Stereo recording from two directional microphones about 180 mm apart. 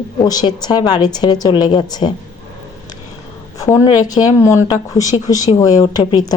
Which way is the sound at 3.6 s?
15° left (ahead or behind).